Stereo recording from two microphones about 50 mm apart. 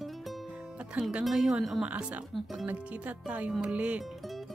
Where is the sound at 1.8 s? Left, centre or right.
Right.